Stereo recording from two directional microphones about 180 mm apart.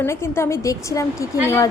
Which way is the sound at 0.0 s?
15° left (ahead or behind).